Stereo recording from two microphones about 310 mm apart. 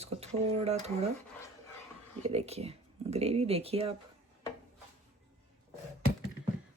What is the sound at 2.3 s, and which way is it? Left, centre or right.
Speech, centre.